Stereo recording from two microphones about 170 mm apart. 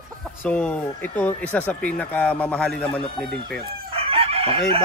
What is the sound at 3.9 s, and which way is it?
Chicken, 35° right (ahead or behind).